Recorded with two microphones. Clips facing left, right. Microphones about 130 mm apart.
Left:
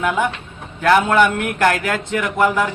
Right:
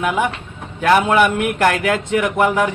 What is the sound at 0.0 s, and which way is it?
A man's voice, 15° right (ahead or behind).